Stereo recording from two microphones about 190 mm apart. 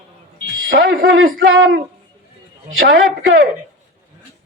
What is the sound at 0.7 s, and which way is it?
Speech, 55° right (ahead or behind).